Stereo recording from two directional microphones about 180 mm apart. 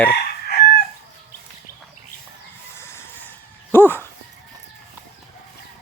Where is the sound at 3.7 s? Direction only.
10° left (ahead or behind).